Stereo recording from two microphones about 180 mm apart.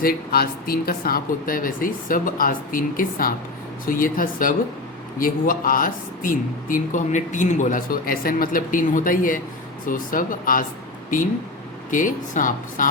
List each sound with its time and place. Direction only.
0.0 s speech: 55° left (ahead or behind)
11.9 s speech: 45° left (ahead or behind)